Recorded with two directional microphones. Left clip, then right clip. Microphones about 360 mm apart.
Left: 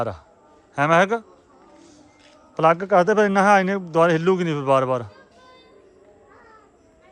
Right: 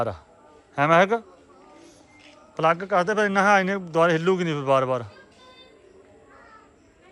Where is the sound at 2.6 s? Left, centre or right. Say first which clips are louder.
Left 4 dB; centre.